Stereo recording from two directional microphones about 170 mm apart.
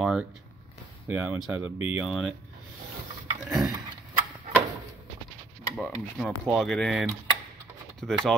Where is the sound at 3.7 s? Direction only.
25° right (ahead or behind).